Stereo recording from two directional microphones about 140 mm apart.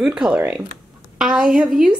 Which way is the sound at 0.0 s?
5° right (ahead or behind).